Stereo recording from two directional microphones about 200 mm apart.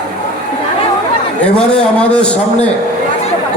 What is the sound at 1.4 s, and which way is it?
A man's voice, 5° left (ahead or behind).